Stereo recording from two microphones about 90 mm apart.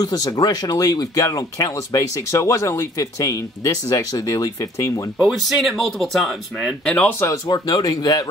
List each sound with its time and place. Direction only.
0.0 s speech: 45° left (ahead or behind)
5.2 s speech: centre (ahead or behind)
7.0 s speech: 20° left (ahead or behind)
7.4 s speech: 50° left (ahead or behind)